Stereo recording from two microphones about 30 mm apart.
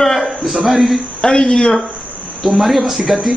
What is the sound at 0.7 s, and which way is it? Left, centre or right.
Speech, centre.